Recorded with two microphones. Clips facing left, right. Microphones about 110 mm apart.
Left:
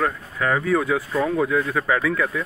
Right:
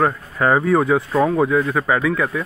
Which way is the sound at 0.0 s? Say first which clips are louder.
Right 5 dB; 30° right (ahead or behind).